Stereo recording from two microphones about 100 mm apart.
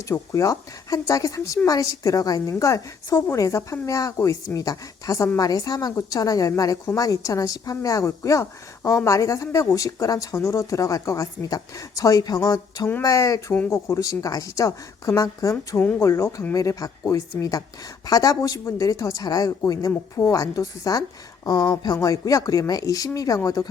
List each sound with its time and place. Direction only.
0.0 s speech: 35° left (ahead or behind)